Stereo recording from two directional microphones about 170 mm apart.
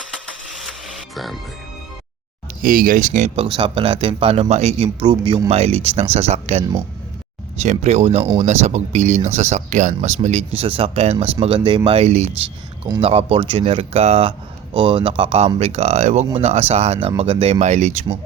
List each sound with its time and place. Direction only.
1.1 s speech: centre (ahead or behind)
2.6 s speech: 55° right (ahead or behind)
3.5 s speech: 30° right (ahead or behind)